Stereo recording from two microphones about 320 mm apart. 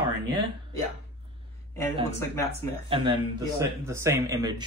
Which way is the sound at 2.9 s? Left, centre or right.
Centre.